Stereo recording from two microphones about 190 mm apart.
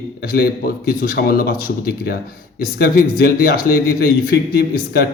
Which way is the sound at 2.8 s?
55° left (ahead or behind).